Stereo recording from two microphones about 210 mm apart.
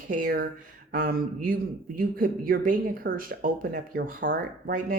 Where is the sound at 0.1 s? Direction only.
45° right (ahead or behind).